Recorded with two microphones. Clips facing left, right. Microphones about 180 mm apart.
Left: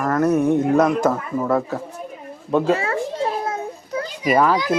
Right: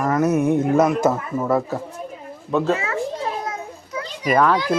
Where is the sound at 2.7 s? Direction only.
30° left (ahead or behind).